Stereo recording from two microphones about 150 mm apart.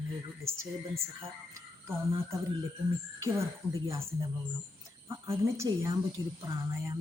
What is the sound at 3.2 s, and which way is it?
A woman's voice, 20° right (ahead or behind).